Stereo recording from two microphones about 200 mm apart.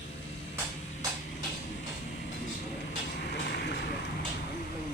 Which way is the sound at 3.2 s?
55° left (ahead or behind).